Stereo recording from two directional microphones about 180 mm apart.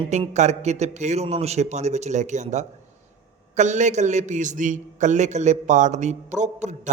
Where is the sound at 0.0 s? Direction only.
35° right (ahead or behind).